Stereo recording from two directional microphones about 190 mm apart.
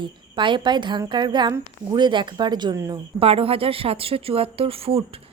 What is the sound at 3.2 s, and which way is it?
Speech, 30° right (ahead or behind).